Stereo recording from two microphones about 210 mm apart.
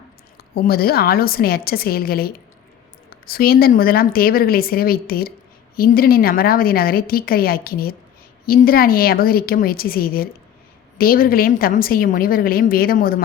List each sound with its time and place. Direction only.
0.5 s a woman's voice: 45° left (ahead or behind)